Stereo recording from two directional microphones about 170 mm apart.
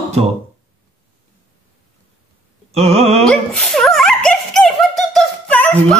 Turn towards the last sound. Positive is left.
turn(degrees=10)  # may be behind; listen again after turning